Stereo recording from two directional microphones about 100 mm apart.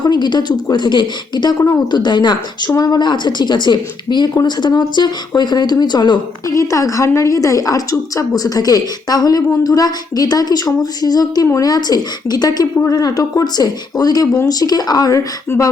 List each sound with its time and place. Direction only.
0.0 s speech: 50° left (ahead or behind)
6.5 s a woman's voice: 30° left (ahead or behind)